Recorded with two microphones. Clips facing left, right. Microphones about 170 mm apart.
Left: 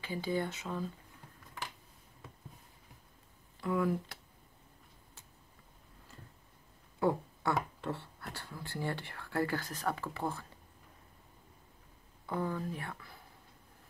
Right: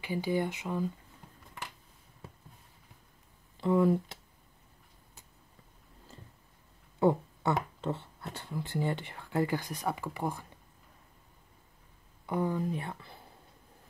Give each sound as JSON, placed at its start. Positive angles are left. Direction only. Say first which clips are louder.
{"t": 0.0, "sound": "speech", "louder": "right 4 dB", "side_deg": -15}
{"t": 3.6, "sound": "speech", "louder": "right 6 dB", "side_deg": -25}
{"t": 7.0, "sound": "speech", "louder": "right 5 dB", "side_deg": -20}
{"t": 12.3, "sound": "speech", "louder": "right 5 dB", "side_deg": -15}